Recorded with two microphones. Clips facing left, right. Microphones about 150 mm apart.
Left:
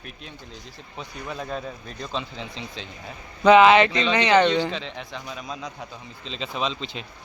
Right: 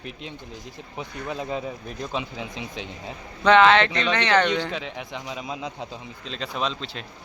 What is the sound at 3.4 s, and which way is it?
Speech, 5° left (ahead or behind).